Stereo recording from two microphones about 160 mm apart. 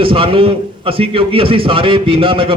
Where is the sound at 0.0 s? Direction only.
35° right (ahead or behind).